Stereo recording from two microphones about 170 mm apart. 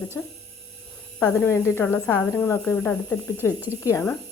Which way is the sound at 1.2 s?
15° left (ahead or behind).